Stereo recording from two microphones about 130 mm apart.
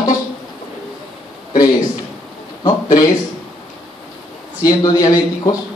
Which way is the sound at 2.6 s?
30° left (ahead or behind).